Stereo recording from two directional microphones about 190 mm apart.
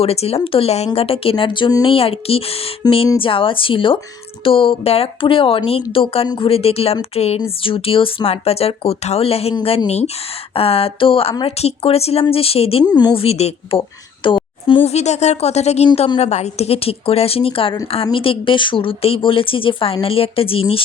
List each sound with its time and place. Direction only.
0.0 s a woman's voice: 30° left (ahead or behind)